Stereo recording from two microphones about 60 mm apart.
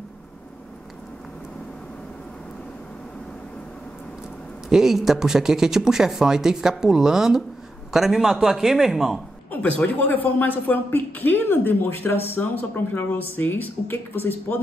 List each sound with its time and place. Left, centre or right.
4.6 s a man's voice: centre
9.5 s speech: left